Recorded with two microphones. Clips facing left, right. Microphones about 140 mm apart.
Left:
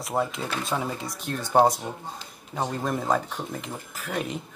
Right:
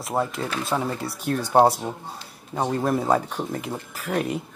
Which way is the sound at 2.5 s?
5° right (ahead or behind).